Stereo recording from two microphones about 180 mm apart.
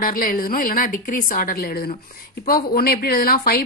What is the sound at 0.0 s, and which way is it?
A woman's voice, 50° left (ahead or behind).